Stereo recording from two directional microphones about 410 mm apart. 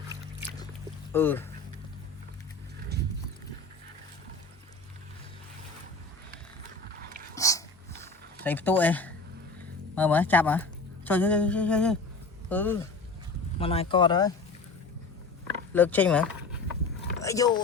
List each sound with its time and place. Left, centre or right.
1.1 s speech: centre
2.9 s clip-clop: right
7.3 s dog: centre
9.9 s speech: centre
15.7 s speech: centre